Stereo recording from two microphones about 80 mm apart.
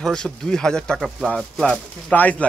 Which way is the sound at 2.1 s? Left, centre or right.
Left.